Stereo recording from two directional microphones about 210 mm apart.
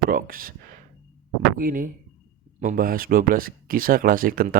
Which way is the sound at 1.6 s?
40° right (ahead or behind).